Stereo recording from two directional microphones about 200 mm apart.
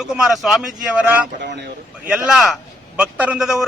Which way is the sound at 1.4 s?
55° right (ahead or behind).